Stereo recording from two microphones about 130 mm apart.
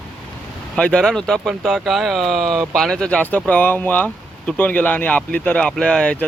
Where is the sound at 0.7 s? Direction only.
10° left (ahead or behind).